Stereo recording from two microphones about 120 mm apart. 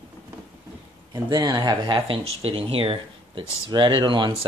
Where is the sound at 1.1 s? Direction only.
35° right (ahead or behind); by 3.4 s 50° right (ahead or behind).